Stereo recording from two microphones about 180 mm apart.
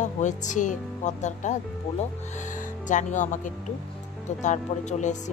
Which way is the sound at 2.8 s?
45° left (ahead or behind).